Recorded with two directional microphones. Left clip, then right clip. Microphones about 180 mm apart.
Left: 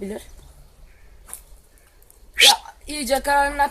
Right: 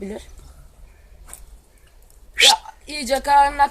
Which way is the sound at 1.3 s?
10° right (ahead or behind).